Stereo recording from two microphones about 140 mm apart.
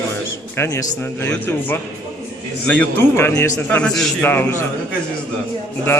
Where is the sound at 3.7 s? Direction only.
5° left (ahead or behind).